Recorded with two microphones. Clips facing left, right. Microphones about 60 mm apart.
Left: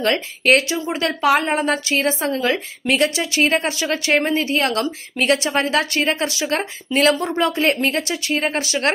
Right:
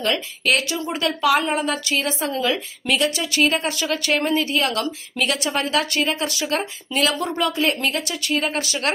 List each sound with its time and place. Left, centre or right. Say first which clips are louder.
0.0 s a woman's voice: left 4 dB; left